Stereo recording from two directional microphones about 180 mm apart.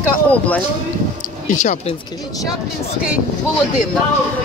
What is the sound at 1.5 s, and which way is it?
Speech, 45° left (ahead or behind).